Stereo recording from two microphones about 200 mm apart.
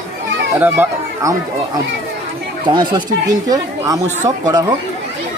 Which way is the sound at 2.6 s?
20° right (ahead or behind).